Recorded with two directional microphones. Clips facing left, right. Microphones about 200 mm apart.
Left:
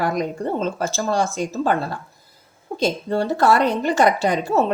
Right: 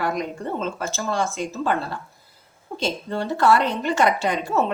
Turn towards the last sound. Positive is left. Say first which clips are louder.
# left 3 dB
turn(degrees=35)  # may be behind; listen again after turning